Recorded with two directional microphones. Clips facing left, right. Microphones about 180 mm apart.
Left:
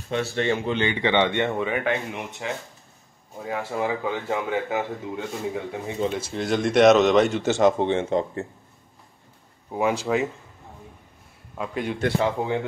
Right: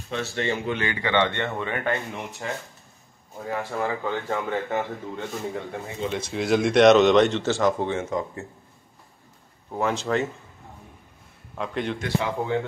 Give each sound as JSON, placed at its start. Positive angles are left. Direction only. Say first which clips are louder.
{"t": 0.4, "sound": "speech", "louder": "left 2 dB", "side_deg": 25}
{"t": 7.4, "sound": "speech", "louder": "left 3 dB", "side_deg": 20}
{"t": 9.7, "sound": "speech", "louder": "left 2 dB", "side_deg": 10}
{"t": 11.5, "sound": "a man's voice", "louder": "even", "side_deg": 5}
{"t": 12.4, "sound": "speech", "louder": "left 1 dB", "side_deg": 20}